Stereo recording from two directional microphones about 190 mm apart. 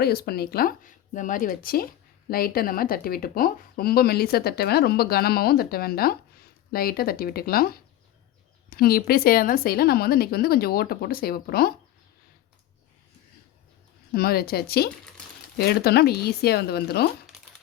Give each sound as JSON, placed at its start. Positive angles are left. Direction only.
{"t": 0.0, "sound": "speech", "side_deg": 55}
{"t": 14.1, "sound": "speech", "side_deg": 55}